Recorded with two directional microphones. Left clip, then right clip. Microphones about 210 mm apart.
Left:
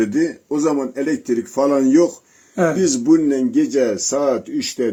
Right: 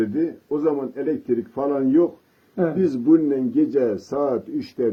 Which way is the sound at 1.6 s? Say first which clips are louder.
Left 6 dB; 20° left (ahead or behind).